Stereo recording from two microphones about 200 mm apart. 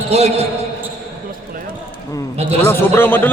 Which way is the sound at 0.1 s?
30° right (ahead or behind).